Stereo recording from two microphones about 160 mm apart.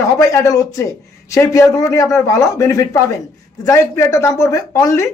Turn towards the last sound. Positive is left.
turn(degrees=20)  # may be behind; listen again after turning